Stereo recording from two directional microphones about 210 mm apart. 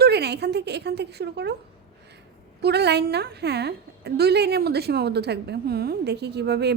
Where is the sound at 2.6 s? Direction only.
50° right (ahead or behind).